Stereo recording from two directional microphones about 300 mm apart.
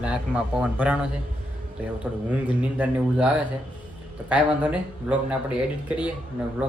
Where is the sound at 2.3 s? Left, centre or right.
Centre.